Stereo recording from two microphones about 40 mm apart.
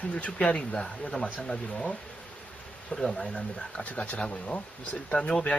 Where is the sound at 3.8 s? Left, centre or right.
Left.